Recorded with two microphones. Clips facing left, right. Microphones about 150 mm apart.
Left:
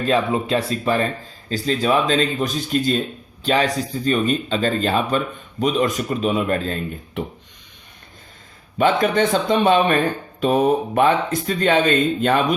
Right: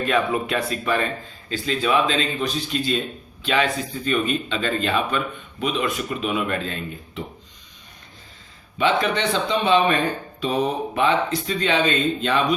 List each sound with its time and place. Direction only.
0.0 s speech: 30° left (ahead or behind)
8.8 s speech: 45° left (ahead or behind)